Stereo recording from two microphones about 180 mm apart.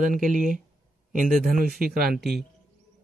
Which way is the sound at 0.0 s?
45° right (ahead or behind).